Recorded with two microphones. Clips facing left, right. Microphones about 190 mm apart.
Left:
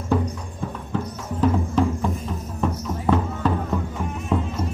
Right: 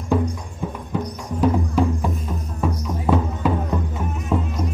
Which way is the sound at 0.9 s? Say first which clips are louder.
Right 1 dB; 10° right (ahead or behind).